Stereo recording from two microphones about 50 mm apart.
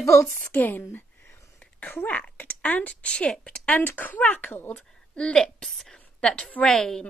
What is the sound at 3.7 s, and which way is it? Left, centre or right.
Speech, left.